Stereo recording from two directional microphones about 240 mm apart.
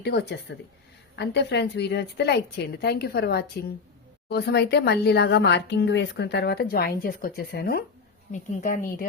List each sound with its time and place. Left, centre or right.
0.0 s a woman's voice: left